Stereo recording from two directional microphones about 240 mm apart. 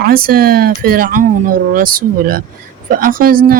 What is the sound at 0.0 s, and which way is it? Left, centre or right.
Speech, right.